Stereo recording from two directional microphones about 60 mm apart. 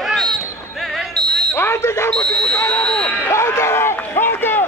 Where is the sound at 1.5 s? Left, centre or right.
Left.